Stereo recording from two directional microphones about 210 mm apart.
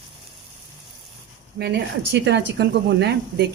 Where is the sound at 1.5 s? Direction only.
55° right (ahead or behind).